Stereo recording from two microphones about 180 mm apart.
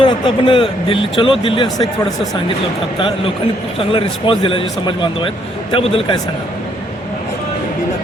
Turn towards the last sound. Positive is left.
turn(degrees=30)  # may be behind; listen again after turning